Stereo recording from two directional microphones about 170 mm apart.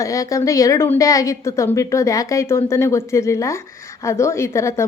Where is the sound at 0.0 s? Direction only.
20° left (ahead or behind).